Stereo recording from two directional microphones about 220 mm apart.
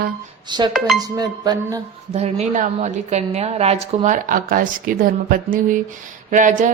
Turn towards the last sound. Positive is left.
turn(degrees=-35)  # may be behind; listen again after turning